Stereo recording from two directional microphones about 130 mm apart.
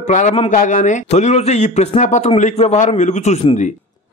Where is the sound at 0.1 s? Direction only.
70° left (ahead or behind).